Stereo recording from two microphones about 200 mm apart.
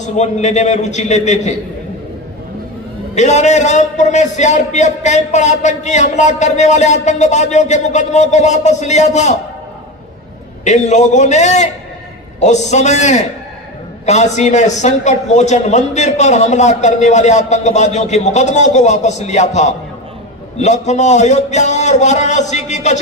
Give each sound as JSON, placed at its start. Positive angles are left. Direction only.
{"t": 0.2, "sound": "a man's voice", "side_deg": 35}
{"t": 3.2, "sound": "a man's voice", "side_deg": 35}
{"t": 10.6, "sound": "a man's voice", "side_deg": 35}